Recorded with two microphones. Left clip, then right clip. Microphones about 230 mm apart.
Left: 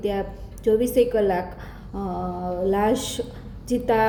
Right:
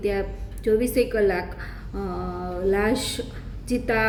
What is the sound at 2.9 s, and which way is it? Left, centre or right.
Speech, right.